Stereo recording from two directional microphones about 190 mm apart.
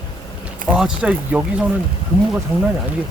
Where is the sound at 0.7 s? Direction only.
5° right (ahead or behind).